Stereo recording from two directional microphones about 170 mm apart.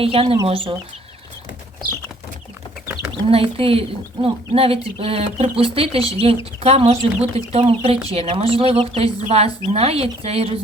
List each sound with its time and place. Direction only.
0.0 s speech: 35° right (ahead or behind)
3.2 s speech: 35° right (ahead or behind)